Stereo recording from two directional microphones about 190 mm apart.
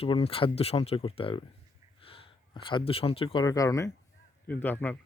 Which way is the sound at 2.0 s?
30° left (ahead or behind).